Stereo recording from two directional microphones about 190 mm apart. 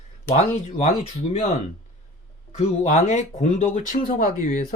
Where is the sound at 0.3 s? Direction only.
35° left (ahead or behind).